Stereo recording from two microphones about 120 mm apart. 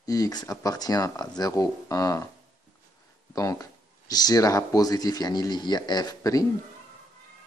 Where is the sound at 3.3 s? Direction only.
25° left (ahead or behind).